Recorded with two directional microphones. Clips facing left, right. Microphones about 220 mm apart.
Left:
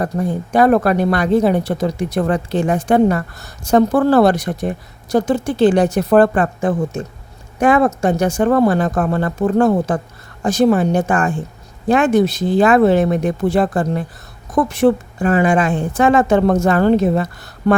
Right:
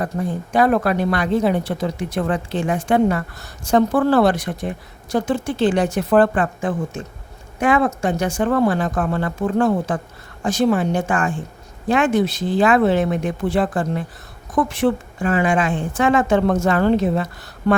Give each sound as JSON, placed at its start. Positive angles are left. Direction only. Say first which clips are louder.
{"t": 0.5, "sound": "speech", "louder": "left 4 dB", "side_deg": 45}